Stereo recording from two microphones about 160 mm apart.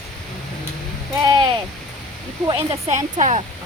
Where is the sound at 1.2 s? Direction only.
25° right (ahead or behind).